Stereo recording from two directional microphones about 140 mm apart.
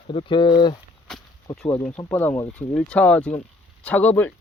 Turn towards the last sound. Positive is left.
turn(degrees=10)  # may be behind; listen again after turning